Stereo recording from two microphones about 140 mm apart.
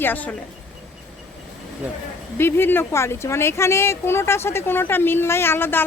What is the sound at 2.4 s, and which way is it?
Speech, 15° left (ahead or behind).